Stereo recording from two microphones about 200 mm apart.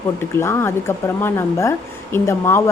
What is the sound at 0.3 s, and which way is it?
Speech, 10° left (ahead or behind).